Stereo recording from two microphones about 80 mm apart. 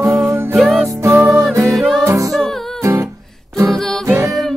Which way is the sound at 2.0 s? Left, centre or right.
Right.